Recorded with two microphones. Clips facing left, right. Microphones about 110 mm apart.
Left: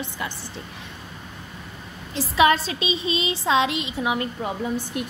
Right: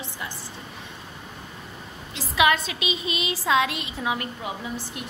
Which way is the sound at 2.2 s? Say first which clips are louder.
Left 3 dB; 35° left (ahead or behind).